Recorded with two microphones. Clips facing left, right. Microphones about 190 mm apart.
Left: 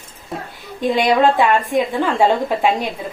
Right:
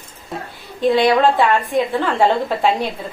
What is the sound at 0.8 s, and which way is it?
A woman's voice, 15° left (ahead or behind).